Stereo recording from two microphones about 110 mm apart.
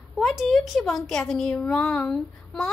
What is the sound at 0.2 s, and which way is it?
A woman's voice, centre (ahead or behind).